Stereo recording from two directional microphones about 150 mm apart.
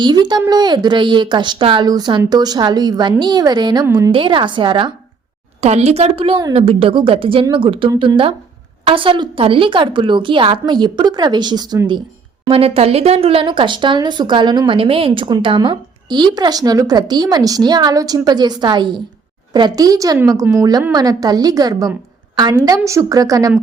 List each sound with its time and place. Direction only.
0.0 s a woman's voice: 30° right (ahead or behind)
5.5 s a woman's voice: 45° right (ahead or behind); by 12.0 s 30° right (ahead or behind)
12.5 s speech: 40° right (ahead or behind); by 23.6 s 25° right (ahead or behind)